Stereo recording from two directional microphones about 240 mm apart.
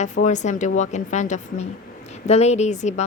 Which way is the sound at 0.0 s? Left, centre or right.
Left.